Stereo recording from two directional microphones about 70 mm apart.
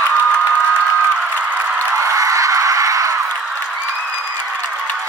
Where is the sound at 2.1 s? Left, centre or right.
Right.